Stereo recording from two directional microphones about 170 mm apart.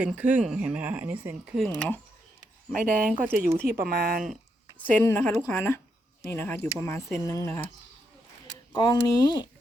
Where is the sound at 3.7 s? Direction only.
65° right (ahead or behind).